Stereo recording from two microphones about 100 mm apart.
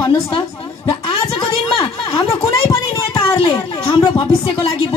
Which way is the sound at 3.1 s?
55° left (ahead or behind).